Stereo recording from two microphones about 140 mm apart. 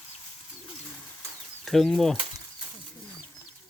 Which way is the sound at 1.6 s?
Centre (ahead or behind).